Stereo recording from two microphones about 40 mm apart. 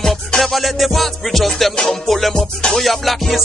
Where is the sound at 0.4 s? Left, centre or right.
Centre.